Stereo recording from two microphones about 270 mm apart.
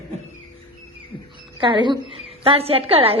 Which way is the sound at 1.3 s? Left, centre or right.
Centre.